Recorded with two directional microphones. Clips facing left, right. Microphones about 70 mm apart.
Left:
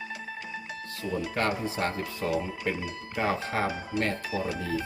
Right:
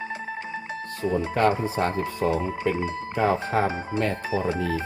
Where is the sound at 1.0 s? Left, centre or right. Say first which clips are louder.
Right 7 dB; right.